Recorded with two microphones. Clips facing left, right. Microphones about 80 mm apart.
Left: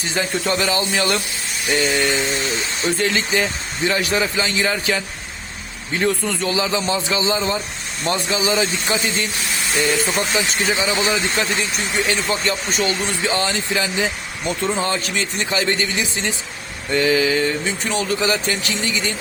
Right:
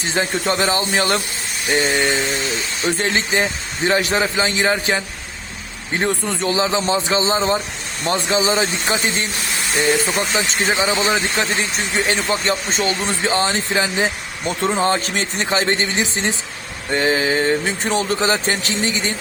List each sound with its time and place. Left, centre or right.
0.0 s speech: right
10.2 s speech: right